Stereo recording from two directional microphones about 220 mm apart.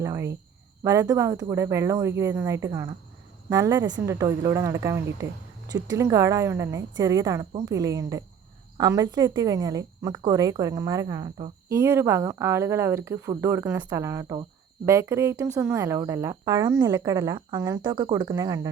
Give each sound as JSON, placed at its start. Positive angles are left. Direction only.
{"t": 0.0, "sound": "speech", "side_deg": -15}